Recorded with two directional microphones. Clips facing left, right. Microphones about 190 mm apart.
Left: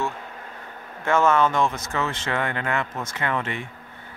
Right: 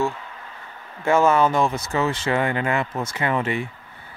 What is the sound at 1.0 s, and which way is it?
Speech, 10° right (ahead or behind).